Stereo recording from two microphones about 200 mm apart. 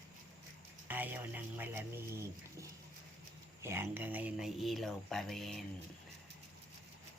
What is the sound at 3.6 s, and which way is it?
Speech, 10° right (ahead or behind).